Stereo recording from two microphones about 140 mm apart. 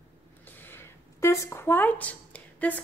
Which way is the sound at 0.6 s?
15° left (ahead or behind).